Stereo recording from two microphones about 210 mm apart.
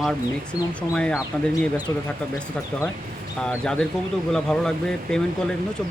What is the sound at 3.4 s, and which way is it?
Speech, 5° left (ahead or behind).